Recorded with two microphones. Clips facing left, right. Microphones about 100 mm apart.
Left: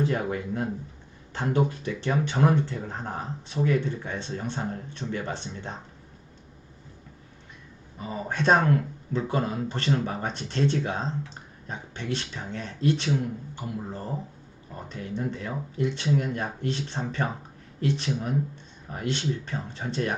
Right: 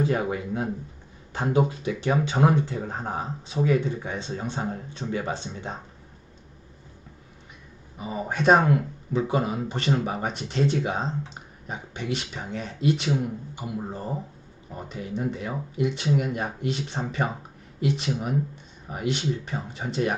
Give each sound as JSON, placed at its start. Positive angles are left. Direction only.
{"t": 0.0, "sound": "speech", "side_deg": -10}
{"t": 7.9, "sound": "speech", "side_deg": -10}